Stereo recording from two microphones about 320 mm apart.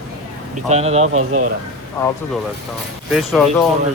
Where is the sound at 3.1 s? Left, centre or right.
Centre.